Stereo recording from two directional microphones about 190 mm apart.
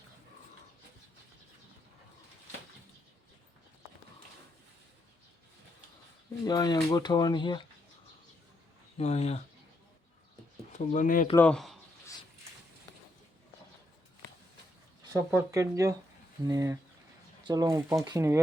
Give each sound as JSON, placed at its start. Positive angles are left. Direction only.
{"t": 6.4, "sound": "speech", "side_deg": 20}
{"t": 9.0, "sound": "speech", "side_deg": 35}
{"t": 10.7, "sound": "speech", "side_deg": 40}
{"t": 11.3, "sound": "speech", "side_deg": 5}
{"t": 15.3, "sound": "speech", "side_deg": -15}